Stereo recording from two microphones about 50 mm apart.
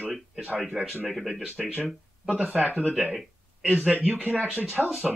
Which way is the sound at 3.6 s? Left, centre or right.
Right.